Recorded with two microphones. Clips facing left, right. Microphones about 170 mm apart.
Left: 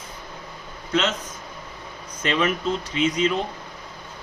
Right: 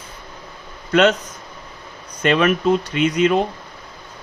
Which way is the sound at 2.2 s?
60° right (ahead or behind).